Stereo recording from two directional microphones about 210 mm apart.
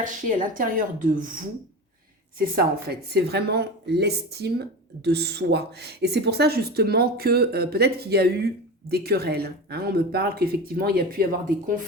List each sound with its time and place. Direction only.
0.0 s a woman's voice: 40° right (ahead or behind)